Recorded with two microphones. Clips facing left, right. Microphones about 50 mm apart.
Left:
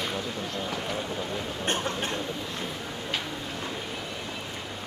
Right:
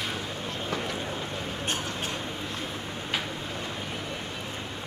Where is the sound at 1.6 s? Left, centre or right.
Left.